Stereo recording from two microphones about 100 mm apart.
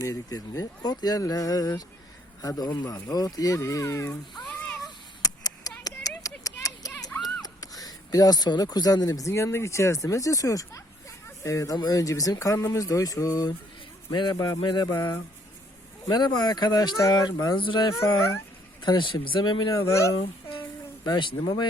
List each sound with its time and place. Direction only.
0.0 s speech: 35° left (ahead or behind)
4.4 s a sound: 5° left (ahead or behind)
5.2 s a sound: 35° left (ahead or behind)
7.4 s speech: 40° left (ahead or behind)
14.1 s speech: 50° left (ahead or behind)
14.3 s speech: 35° left (ahead or behind)
17.6 s speech: 55° left (ahead or behind)
19.9 s speech: 30° left (ahead or behind)
20.1 s a sound: 60° left (ahead or behind)
21.0 s speech: 40° left (ahead or behind)